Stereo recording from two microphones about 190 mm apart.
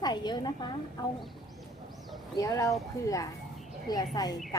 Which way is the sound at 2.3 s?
15° left (ahead or behind).